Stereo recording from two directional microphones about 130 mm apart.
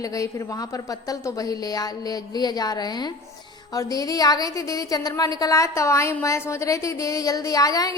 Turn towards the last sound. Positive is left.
turn(degrees=25)  # may be behind; listen again after turning